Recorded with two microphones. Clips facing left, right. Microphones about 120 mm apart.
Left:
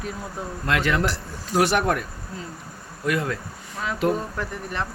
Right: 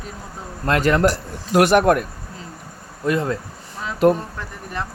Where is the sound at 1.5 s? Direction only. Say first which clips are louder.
Right 6 dB; 60° right (ahead or behind).